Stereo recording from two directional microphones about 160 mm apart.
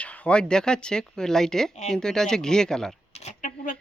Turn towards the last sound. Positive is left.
turn(degrees=50)  # may be behind; listen again after turning